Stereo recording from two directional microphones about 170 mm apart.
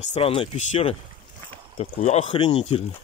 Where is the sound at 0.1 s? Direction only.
35° left (ahead or behind).